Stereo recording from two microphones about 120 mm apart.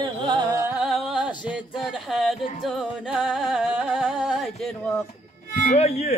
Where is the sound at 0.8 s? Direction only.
5° right (ahead or behind).